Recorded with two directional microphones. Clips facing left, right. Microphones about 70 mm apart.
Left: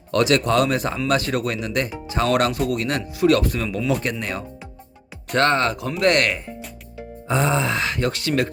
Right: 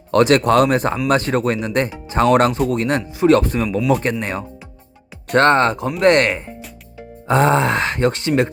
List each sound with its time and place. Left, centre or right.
0.1 s speech: right
7.3 s speech: right